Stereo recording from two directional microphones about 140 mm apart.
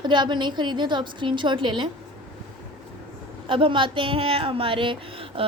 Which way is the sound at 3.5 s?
35° right (ahead or behind).